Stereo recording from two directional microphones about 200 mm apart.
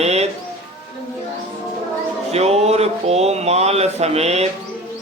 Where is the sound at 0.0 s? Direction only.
30° right (ahead or behind).